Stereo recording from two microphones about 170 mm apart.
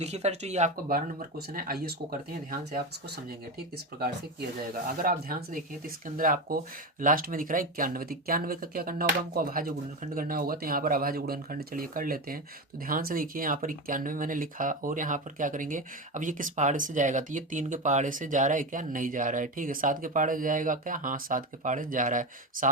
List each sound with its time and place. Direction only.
0.0 s speech: 40° right (ahead or behind)
0.9 s speech: 60° right (ahead or behind)
4.0 s speech: 60° right (ahead or behind)